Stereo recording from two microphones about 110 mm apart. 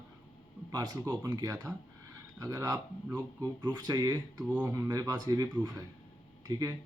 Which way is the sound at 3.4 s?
40° right (ahead or behind).